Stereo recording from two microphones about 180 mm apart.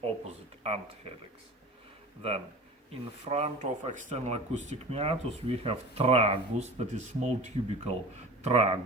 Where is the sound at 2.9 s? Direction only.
35° right (ahead or behind).